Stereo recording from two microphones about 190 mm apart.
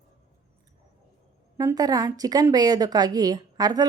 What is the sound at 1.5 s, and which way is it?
A woman's voice, 20° right (ahead or behind).